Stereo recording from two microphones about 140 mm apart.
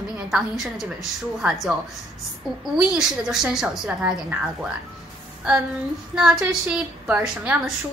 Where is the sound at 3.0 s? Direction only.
5° right (ahead or behind).